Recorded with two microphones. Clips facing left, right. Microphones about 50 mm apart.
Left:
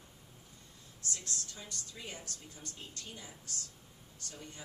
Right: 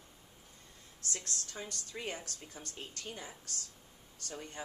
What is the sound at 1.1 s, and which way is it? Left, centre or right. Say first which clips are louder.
Speech: right 1 dB; right.